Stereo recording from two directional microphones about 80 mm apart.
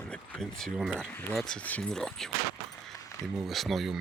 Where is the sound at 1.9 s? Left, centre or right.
Centre.